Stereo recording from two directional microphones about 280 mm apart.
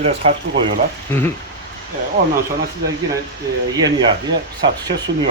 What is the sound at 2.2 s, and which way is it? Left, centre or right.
Speech, right.